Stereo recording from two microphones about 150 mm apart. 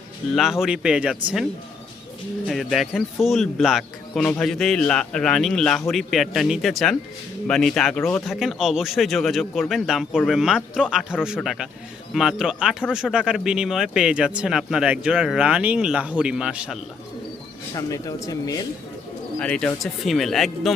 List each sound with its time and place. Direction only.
0.3 s speech: 5° right (ahead or behind)
2.5 s speech: centre (ahead or behind)
17.7 s speech: 25° left (ahead or behind)
19.4 s speech: 5° left (ahead or behind)